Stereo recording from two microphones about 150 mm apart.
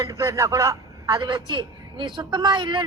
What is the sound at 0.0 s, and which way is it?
A man's voice, 20° right (ahead or behind).